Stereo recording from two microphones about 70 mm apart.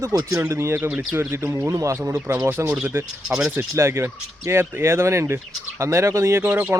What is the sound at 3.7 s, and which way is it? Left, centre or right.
Speech, right.